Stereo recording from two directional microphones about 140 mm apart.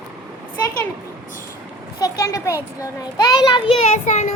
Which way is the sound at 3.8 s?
55° left (ahead or behind).